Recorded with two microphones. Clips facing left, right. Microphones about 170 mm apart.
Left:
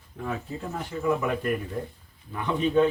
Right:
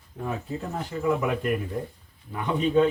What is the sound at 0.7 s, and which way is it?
Speech, 15° right (ahead or behind).